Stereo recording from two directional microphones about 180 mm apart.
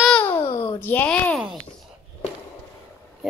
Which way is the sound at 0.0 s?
10° left (ahead or behind).